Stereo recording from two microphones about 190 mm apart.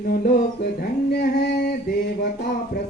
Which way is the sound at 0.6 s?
55° left (ahead or behind).